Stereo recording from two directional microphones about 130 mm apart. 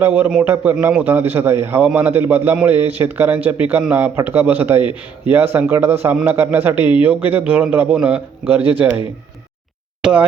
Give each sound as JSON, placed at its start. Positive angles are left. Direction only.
{"t": 0.0, "sound": "a man's voice", "side_deg": -15}
{"t": 10.0, "sound": "speech", "side_deg": -10}